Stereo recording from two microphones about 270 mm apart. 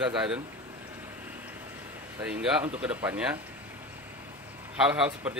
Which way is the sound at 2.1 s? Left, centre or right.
Centre.